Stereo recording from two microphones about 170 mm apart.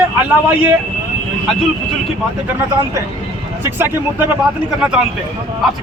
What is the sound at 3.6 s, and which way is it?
A man's voice, 15° right (ahead or behind).